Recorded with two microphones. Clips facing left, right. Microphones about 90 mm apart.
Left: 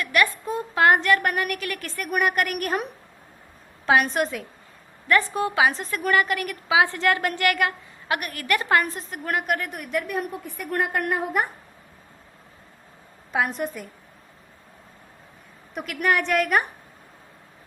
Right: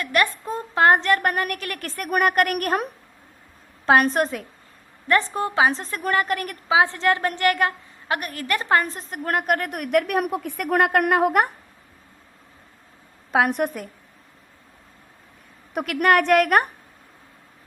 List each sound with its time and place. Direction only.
0.0 s a woman's voice: 35° right (ahead or behind)
3.8 s a woman's voice: 40° right (ahead or behind)
6.8 s a woman's voice: 20° right (ahead or behind)
9.0 s a woman's voice: 45° right (ahead or behind); by 11.5 s 65° right (ahead or behind)
13.3 s a woman's voice: 60° right (ahead or behind)
15.7 s a woman's voice: 55° right (ahead or behind)